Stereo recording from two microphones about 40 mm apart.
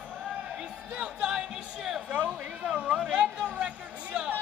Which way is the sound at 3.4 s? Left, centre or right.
Right.